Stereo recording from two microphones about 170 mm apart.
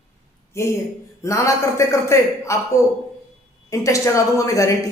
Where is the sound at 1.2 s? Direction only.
20° left (ahead or behind).